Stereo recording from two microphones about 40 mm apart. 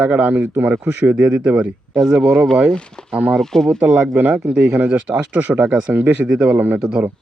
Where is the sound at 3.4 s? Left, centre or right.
Centre.